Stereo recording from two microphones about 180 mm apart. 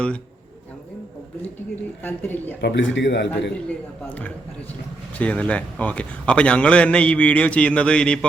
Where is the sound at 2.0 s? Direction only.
10° left (ahead or behind).